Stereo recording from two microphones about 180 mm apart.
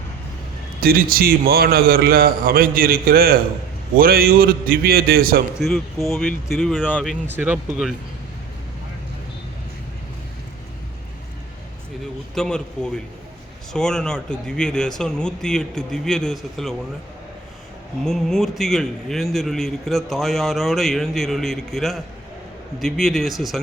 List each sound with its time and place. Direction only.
0.8 s a man's voice: 55° right (ahead or behind)
5.5 s a man's voice: centre (ahead or behind)
7.3 s speech: 10° right (ahead or behind)
12.3 s a man's voice: 5° left (ahead or behind)
18.0 s a man's voice: centre (ahead or behind)